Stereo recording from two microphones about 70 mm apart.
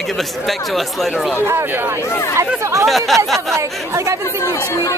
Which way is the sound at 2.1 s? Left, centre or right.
Left.